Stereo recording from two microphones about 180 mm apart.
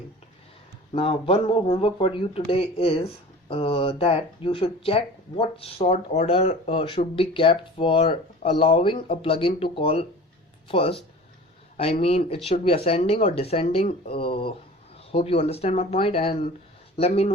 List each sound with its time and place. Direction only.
0.9 s speech: 30° left (ahead or behind)